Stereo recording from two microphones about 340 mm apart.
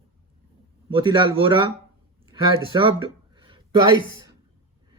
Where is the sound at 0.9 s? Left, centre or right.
Centre.